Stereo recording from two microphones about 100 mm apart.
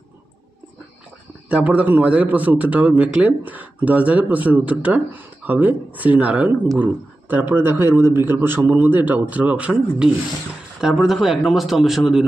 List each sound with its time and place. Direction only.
1.5 s a man's voice: 15° right (ahead or behind)